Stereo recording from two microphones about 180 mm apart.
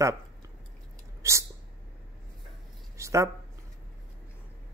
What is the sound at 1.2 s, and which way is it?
Sneeze, 15° right (ahead or behind).